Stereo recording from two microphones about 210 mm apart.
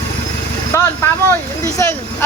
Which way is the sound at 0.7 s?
15° left (ahead or behind).